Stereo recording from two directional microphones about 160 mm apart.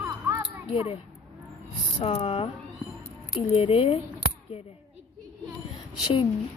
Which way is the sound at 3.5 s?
35° left (ahead or behind).